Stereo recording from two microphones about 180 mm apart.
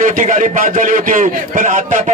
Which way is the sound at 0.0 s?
45° right (ahead or behind).